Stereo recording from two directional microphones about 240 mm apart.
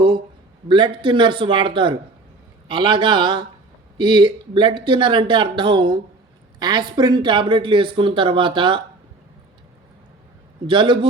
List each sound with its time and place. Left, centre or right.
0.7 s speech: centre
10.7 s speech: centre